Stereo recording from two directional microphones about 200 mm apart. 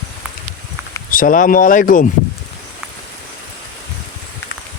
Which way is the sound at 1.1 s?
45° left (ahead or behind).